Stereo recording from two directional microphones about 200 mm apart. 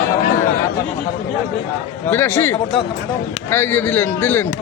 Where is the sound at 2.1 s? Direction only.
10° left (ahead or behind).